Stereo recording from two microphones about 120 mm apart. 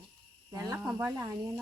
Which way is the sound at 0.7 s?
15° right (ahead or behind).